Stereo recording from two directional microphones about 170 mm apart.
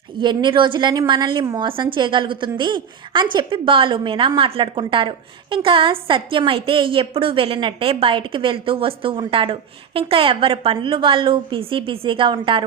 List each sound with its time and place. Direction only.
0.2 s a woman's voice: 25° right (ahead or behind)